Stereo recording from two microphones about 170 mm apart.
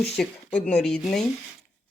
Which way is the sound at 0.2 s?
5° left (ahead or behind).